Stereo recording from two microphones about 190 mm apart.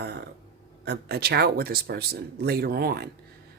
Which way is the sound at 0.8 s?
60° right (ahead or behind).